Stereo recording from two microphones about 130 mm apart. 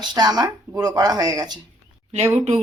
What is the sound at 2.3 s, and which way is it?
Speech, 60° right (ahead or behind).